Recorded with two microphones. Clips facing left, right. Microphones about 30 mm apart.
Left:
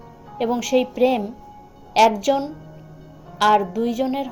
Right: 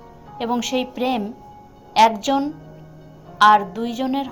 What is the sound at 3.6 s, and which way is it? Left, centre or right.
Speech, right.